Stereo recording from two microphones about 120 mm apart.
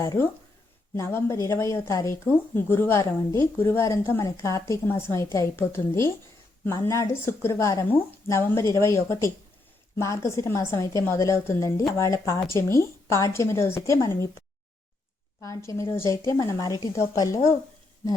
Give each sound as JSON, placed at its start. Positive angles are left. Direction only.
{"t": 0.0, "sound": "speech", "side_deg": 30}
{"t": 15.4, "sound": "speech", "side_deg": 25}